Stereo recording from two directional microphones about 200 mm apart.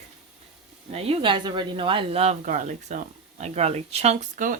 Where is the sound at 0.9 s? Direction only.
30° right (ahead or behind).